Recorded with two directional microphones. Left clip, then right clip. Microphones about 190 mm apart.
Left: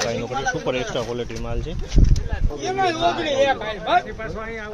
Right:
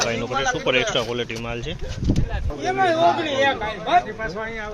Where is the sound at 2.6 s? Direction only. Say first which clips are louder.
Right 3 dB; 30° right (ahead or behind).